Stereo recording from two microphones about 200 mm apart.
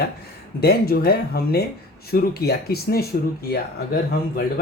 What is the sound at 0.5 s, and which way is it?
Speech, 50° left (ahead or behind).